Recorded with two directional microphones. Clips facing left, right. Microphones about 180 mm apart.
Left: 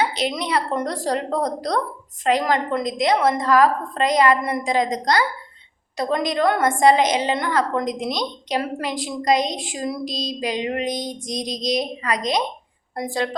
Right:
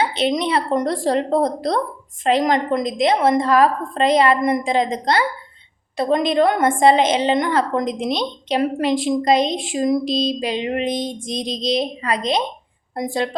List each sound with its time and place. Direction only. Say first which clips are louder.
0.2 s a woman's voice: right 4 dB; 25° right (ahead or behind)